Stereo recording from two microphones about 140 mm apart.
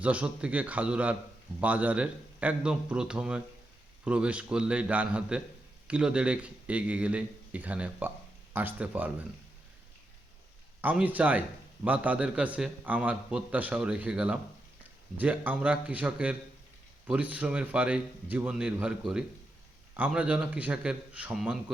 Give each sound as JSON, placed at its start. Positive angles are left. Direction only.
{"t": 0.0, "sound": "a man's voice", "side_deg": -10}
{"t": 10.8, "sound": "a man's voice", "side_deg": -10}